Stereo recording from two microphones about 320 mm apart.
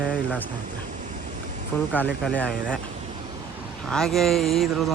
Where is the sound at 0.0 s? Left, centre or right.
Centre.